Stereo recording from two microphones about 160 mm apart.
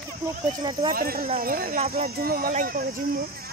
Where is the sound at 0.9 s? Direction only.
65° right (ahead or behind).